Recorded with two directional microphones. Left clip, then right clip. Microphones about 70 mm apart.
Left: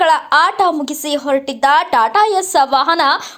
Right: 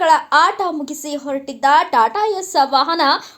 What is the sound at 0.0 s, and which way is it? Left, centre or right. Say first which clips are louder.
A woman's voice: left 1 dB; left.